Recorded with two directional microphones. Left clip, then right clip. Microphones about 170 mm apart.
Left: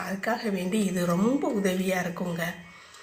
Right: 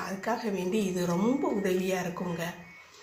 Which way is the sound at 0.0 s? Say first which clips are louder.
Left 3 dB; 15° left (ahead or behind).